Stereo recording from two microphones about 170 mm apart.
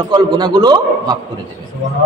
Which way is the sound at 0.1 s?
25° right (ahead or behind).